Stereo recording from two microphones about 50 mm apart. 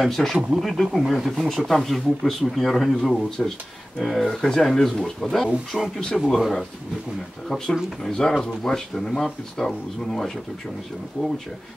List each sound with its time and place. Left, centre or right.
0.0 s speech: centre
7.4 s speech: centre